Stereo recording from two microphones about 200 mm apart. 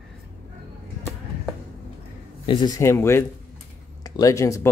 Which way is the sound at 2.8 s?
10° left (ahead or behind).